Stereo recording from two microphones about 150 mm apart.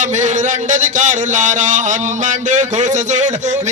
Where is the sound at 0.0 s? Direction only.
55° right (ahead or behind).